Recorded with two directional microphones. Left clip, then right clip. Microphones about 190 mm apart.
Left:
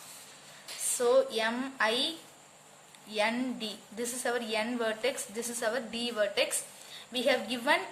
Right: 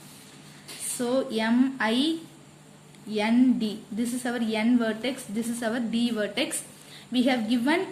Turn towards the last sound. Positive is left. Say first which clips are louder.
# right 2 dB
turn(degrees=10)  # may be behind; listen again after turning